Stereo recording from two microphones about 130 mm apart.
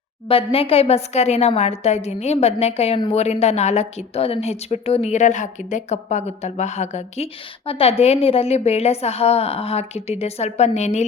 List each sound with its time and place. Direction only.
0.3 s a woman's voice: 45° left (ahead or behind)